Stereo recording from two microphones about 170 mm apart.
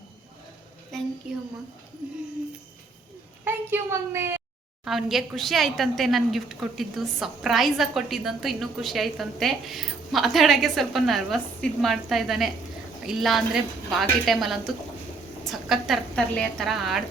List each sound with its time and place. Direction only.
1.2 s a woman's voice: 5° right (ahead or behind)
3.4 s a woman's voice: 15° right (ahead or behind)
4.9 s a woman's voice: centre (ahead or behind)